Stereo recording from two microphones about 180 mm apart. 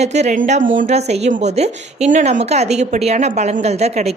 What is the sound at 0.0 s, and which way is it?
A woman's voice, 40° right (ahead or behind).